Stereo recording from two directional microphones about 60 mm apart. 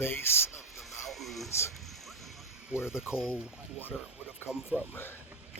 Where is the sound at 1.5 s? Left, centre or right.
Left.